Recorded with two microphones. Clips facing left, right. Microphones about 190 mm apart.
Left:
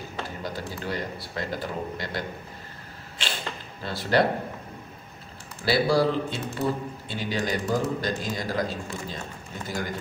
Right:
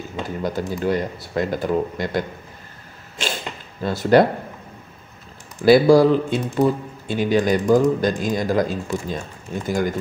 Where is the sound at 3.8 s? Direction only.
50° right (ahead or behind).